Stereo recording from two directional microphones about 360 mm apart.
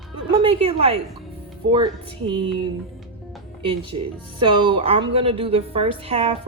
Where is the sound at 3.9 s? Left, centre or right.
Right.